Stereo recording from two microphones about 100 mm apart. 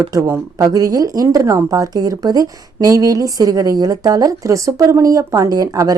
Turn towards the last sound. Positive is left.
turn(degrees=-35)  # may be behind; listen again after turning